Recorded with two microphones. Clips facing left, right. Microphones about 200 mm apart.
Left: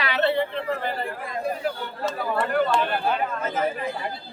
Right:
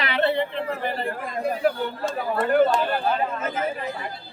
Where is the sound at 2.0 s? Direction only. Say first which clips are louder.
Right 1 dB; 45° right (ahead or behind).